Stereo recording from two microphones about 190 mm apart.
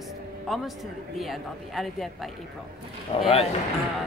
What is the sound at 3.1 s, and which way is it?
Speech, 30° left (ahead or behind).